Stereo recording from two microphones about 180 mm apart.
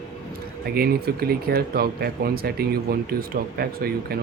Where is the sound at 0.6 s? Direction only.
60° right (ahead or behind).